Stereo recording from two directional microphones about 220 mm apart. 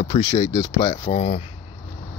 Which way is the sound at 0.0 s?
20° left (ahead or behind).